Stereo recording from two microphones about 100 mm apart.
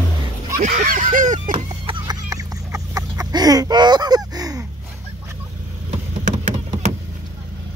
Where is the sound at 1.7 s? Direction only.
55° right (ahead or behind).